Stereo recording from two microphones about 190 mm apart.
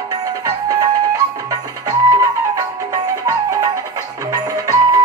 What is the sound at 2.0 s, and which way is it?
Music, 20° right (ahead or behind).